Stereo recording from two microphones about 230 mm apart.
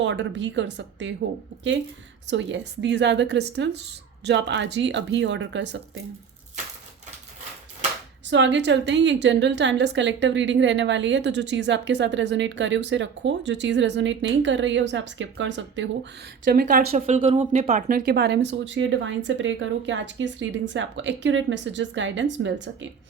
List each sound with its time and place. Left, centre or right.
0.0 s a woman's voice: right
2.2 s a woman's voice: right
8.3 s a woman's voice: right
16.4 s a woman's voice: right